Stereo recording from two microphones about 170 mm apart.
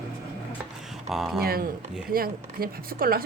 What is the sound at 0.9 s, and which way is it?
Speech, centre (ahead or behind).